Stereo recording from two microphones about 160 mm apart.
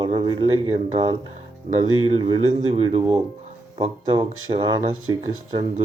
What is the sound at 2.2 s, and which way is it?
Speech, 35° right (ahead or behind).